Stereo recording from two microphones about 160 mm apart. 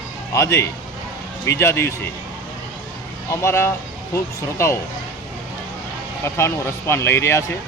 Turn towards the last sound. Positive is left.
turn(degrees=15)  # may be behind; listen again after turning